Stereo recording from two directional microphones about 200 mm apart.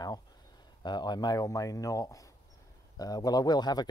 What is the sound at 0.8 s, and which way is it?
Speech, 20° left (ahead or behind).